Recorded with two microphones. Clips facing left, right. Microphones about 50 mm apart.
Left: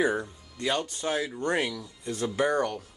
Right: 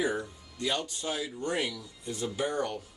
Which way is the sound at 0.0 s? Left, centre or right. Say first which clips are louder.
Left 4 dB; left.